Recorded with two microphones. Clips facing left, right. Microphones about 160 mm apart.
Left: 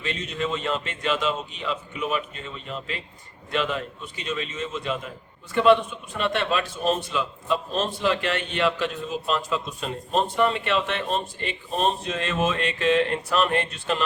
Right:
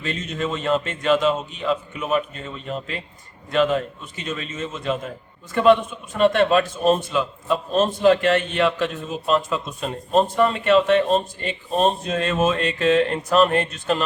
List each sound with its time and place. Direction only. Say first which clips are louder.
0.0 s a man's voice: right 2 dB; 45° right (ahead or behind)
6.1 s a man's voice: right 8 dB; 45° right (ahead or behind)